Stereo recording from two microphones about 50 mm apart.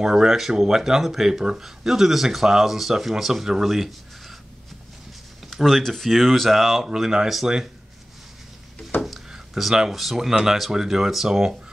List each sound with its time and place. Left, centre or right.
0.0 s speech: centre
5.5 s speech: centre
6.9 s speech: centre
9.0 s a sound: centre
10.3 s speech: centre